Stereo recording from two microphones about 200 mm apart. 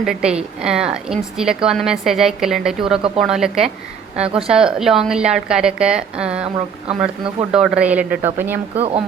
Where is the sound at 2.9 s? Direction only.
30° right (ahead or behind).